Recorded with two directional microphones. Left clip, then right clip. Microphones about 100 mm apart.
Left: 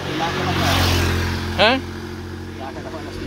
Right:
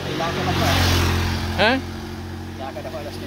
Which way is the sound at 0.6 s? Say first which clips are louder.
Left 1 dB; 35° left (ahead or behind).